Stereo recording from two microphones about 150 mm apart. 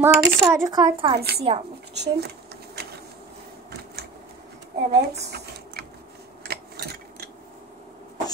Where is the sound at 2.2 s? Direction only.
90° right.